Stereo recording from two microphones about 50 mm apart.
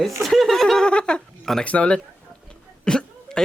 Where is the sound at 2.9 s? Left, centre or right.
Centre.